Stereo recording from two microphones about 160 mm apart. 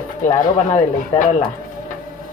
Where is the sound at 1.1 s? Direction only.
25° left (ahead or behind).